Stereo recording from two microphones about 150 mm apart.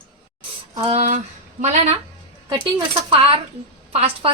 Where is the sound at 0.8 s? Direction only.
40° right (ahead or behind).